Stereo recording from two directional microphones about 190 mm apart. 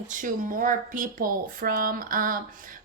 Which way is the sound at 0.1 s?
45° right (ahead or behind).